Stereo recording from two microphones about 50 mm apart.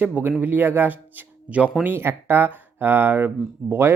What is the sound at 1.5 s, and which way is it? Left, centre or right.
Speech, right.